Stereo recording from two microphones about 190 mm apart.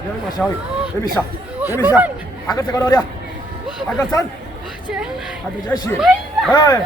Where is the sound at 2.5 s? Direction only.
20° left (ahead or behind).